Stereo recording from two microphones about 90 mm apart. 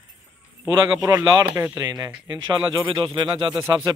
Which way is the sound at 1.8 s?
50° right (ahead or behind).